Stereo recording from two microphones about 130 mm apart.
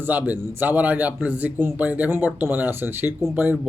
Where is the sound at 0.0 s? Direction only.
15° right (ahead or behind).